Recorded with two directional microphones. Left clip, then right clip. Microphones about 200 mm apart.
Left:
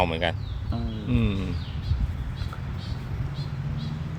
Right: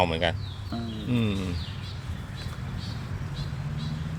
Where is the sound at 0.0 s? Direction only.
Centre (ahead or behind).